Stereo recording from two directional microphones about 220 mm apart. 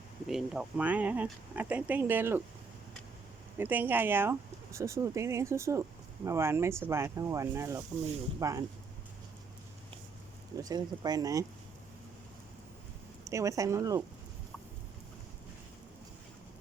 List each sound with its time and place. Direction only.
0.3 s speech: 5° right (ahead or behind)
3.6 s speech: 10° right (ahead or behind)
10.6 s speech: 20° right (ahead or behind)
13.2 s speech: 15° right (ahead or behind)